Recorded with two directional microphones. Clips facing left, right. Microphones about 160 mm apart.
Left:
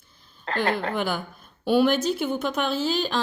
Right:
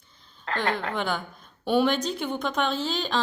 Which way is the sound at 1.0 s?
10° left (ahead or behind).